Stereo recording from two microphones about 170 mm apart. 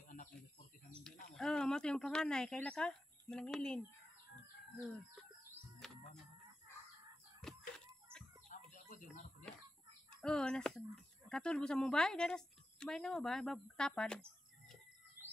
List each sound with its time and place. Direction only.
0.0 s bird: 50° left (ahead or behind)
1.3 s speech: 5° left (ahead or behind)
5.8 s music: 5° left (ahead or behind)
7.4 s chicken: centre (ahead or behind)
8.1 s chicken: 15° right (ahead or behind)
8.5 s chicken: 45° left (ahead or behind)
10.2 s a woman's voice: 5° left (ahead or behind)